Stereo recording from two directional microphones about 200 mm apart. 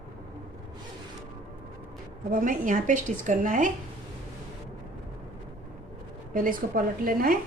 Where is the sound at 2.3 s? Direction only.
45° right (ahead or behind).